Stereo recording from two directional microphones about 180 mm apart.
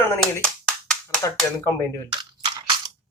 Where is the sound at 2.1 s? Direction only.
25° right (ahead or behind).